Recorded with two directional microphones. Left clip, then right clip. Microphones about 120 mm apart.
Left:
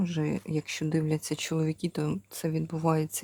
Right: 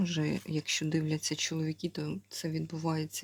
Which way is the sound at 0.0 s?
15° left (ahead or behind).